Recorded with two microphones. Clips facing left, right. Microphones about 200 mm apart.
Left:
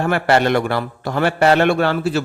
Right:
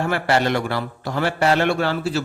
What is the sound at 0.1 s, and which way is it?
A man's voice, 55° left (ahead or behind).